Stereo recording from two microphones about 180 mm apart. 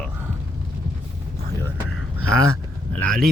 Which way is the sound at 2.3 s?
5° left (ahead or behind).